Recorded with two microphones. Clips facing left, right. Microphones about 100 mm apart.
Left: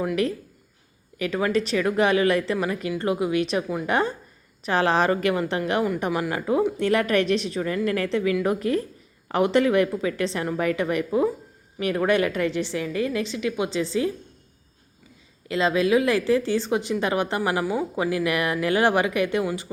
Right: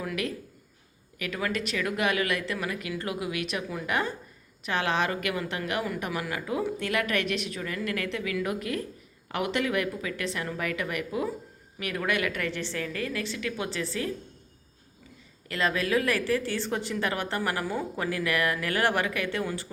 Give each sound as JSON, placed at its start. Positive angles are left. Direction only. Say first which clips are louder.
{"t": 0.0, "sound": "a woman's voice", "louder": "left 8 dB", "side_deg": 30}
{"t": 15.4, "sound": "a woman's voice", "louder": "left 7 dB", "side_deg": 20}